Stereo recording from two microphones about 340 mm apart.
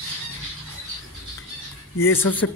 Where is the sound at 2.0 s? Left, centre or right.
Centre.